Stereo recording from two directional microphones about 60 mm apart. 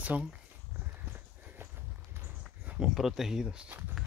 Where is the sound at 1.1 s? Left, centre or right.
Right.